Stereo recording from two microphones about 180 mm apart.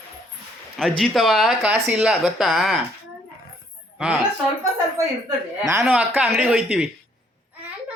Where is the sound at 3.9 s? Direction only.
5° right (ahead or behind).